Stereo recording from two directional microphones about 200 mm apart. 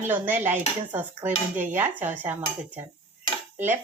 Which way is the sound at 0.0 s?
10° right (ahead or behind).